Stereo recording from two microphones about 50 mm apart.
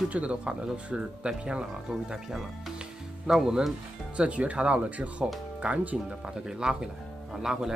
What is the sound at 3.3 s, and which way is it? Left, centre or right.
Speech, centre.